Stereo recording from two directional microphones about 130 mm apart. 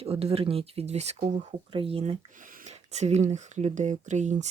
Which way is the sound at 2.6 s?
60° right (ahead or behind).